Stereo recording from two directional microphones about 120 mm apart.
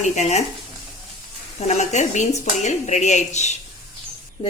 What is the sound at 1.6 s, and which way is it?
Speech, 75° left (ahead or behind).